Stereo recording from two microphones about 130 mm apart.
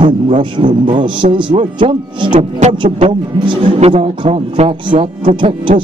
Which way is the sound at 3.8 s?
55° right (ahead or behind).